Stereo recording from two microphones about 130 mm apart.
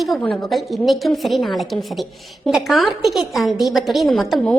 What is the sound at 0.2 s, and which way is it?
A woman's voice, centre (ahead or behind).